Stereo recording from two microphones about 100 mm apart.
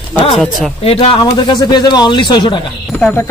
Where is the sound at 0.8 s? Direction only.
75° left (ahead or behind).